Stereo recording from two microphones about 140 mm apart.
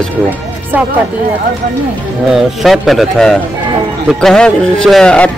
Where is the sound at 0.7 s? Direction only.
15° right (ahead or behind).